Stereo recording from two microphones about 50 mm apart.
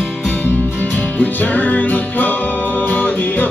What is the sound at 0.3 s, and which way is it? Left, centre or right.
Music, left.